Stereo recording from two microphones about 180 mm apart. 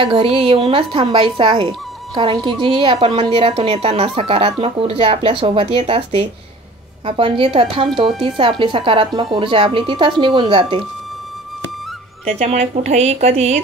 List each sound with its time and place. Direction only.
0.0 s a woman's voice: 30° right (ahead or behind)
12.3 s speech: 40° right (ahead or behind)